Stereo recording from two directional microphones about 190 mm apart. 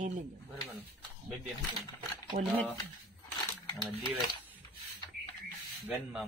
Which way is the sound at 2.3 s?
50° right (ahead or behind).